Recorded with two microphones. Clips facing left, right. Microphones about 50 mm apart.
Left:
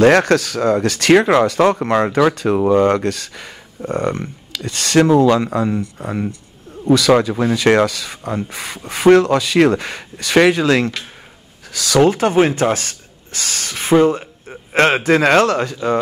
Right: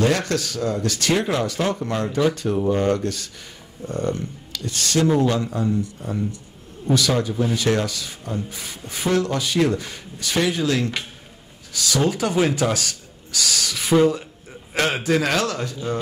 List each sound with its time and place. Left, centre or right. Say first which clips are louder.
0.0 s speech: left 9 dB; left
2.1 s speech: left 6 dB; left
2.8 s a man's voice: left 6 dB; left